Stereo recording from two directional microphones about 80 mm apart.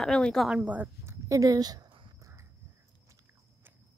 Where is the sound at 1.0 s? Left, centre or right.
Right.